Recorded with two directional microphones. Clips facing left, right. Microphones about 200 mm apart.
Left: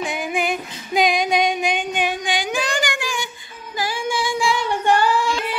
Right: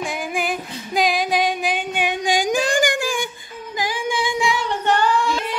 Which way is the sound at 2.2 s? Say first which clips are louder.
Right 4 dB; 45° right (ahead or behind).